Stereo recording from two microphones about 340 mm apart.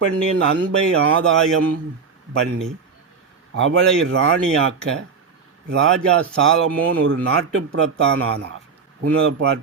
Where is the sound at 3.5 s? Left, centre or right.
Right.